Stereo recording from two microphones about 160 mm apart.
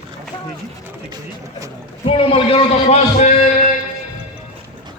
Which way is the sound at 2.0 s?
35° left (ahead or behind).